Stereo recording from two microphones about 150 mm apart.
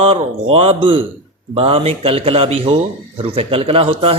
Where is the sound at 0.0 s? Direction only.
40° right (ahead or behind).